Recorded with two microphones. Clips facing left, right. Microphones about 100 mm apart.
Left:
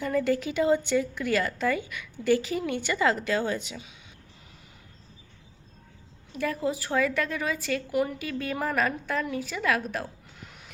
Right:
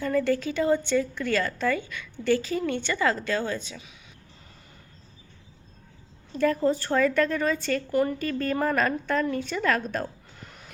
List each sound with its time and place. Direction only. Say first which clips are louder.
0.0 s a woman's voice: right 1 dB; 10° left (ahead or behind)
6.3 s a woman's voice: right 6 dB; 5° left (ahead or behind)